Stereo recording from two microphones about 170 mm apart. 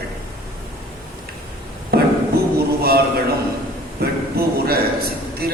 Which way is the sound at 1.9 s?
65° right (ahead or behind).